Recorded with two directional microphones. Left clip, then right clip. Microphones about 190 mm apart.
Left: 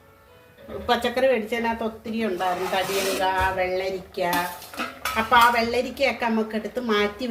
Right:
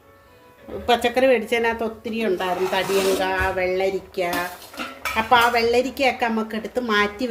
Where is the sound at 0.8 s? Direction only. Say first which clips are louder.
Right 3 dB; 50° right (ahead or behind).